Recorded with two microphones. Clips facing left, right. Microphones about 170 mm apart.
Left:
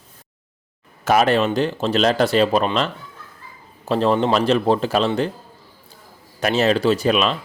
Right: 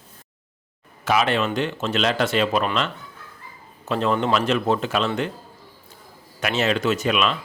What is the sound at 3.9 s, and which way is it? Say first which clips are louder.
Speech: left 4 dB; 35° left (ahead or behind).